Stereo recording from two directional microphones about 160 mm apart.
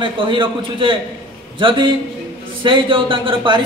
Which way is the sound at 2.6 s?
30° right (ahead or behind).